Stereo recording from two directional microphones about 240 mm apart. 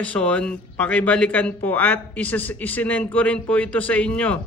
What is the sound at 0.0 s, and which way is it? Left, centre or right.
Speech, centre.